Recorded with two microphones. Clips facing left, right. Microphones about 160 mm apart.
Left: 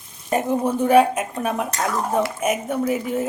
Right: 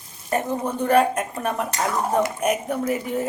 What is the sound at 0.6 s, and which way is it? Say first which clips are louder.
Speech: left 3 dB; 5° left (ahead or behind).